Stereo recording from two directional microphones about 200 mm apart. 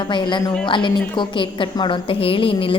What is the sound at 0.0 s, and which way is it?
A woman's voice, 25° left (ahead or behind).